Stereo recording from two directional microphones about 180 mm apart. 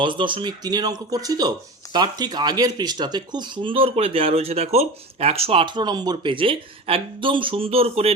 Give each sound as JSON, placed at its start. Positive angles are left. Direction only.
{"t": 0.0, "sound": "speech", "side_deg": -25}